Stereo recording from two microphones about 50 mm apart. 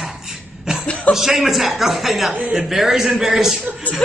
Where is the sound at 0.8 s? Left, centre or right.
Left.